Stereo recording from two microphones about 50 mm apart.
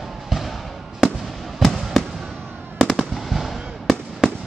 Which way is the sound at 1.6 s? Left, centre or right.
Centre.